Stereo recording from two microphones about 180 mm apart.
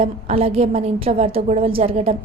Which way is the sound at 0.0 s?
35° right (ahead or behind).